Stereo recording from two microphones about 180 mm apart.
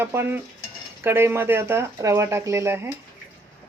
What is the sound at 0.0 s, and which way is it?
Speech, 10° right (ahead or behind).